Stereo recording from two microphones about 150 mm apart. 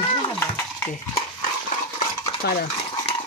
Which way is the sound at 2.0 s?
90° left.